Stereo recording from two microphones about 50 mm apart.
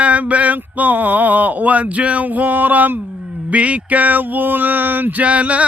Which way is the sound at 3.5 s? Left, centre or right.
Right.